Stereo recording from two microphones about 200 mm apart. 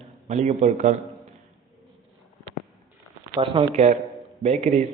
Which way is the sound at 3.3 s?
25° right (ahead or behind).